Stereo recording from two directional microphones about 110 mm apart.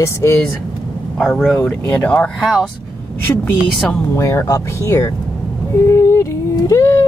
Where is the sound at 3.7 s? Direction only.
5° left (ahead or behind).